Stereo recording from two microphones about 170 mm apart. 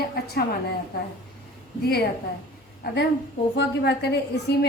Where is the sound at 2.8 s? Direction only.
65° left (ahead or behind).